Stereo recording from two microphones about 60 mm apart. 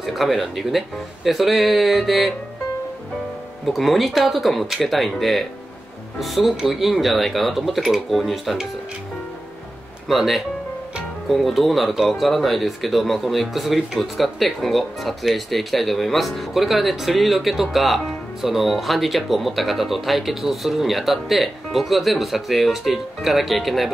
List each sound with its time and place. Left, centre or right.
0.0 s speech: centre
3.6 s speech: centre
10.0 s speech: centre